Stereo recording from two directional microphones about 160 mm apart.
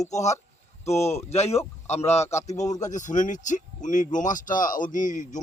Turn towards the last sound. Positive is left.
turn(degrees=55)  # may be behind; listen again after turning